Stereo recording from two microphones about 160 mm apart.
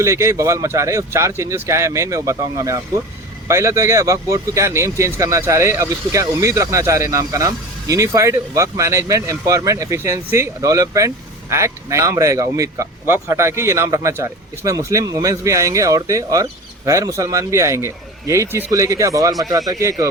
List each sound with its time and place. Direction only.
0.0 s speech: 20° right (ahead or behind)